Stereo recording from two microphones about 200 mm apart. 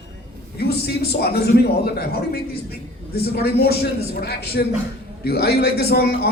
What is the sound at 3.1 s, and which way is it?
A man's voice, 50° left (ahead or behind).